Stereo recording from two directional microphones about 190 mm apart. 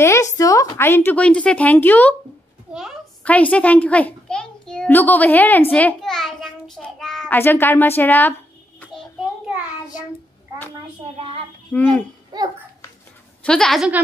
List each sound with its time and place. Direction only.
0.0 s a woman's voice: 15° left (ahead or behind)
2.7 s a child's voice: 5° right (ahead or behind)
3.3 s a child's voice: 5° left (ahead or behind)
9.2 s child singing: 5° right (ahead or behind)
11.7 s speech: 5° left (ahead or behind)
12.3 s a child's voice: 20° right (ahead or behind)
13.4 s speech: 5° left (ahead or behind)